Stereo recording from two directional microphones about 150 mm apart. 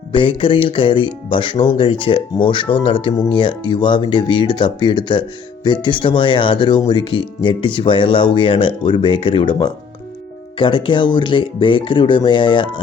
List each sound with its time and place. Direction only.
0.1 s speech: 35° left (ahead or behind)